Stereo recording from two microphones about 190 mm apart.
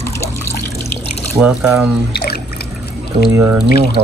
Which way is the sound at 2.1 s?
55° left (ahead or behind).